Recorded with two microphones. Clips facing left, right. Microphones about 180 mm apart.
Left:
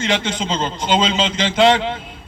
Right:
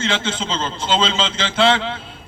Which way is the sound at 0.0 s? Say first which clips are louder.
Left 2 dB; 15° left (ahead or behind).